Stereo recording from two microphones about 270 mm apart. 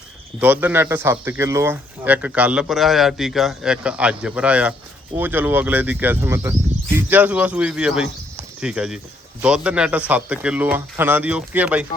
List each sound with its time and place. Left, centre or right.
0.3 s speech: centre